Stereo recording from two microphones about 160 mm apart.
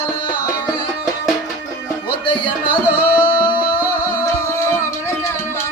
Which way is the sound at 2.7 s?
10° right (ahead or behind).